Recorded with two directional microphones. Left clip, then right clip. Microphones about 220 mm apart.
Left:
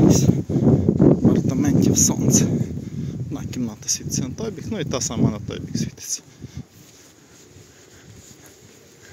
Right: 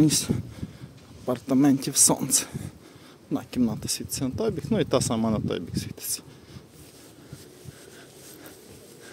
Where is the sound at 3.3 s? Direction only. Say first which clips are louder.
Right 4 dB; 20° right (ahead or behind).